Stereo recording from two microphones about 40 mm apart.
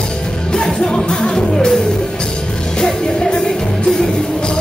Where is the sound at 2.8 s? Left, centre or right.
Centre.